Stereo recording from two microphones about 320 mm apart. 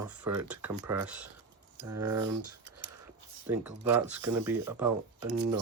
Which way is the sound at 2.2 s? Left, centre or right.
Right.